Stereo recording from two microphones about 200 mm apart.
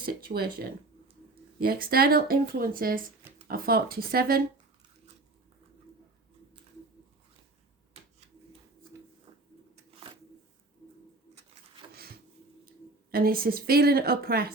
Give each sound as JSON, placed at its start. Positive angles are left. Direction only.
{"t": 0.3, "sound": "speech", "side_deg": -50}
{"t": 12.6, "sound": "speech", "side_deg": -45}